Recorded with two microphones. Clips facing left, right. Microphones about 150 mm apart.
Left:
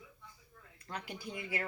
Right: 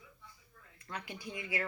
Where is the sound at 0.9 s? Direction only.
45° left (ahead or behind).